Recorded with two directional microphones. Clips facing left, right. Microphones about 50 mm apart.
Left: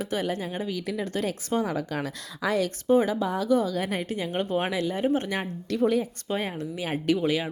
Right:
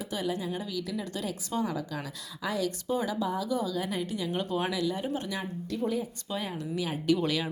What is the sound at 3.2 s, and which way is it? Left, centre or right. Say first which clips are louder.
Speech: left 6 dB; left.